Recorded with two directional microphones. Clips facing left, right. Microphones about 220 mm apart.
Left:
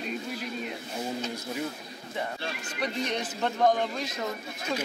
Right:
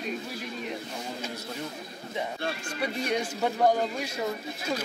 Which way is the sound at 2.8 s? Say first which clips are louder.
Right 1 dB; 10° right (ahead or behind).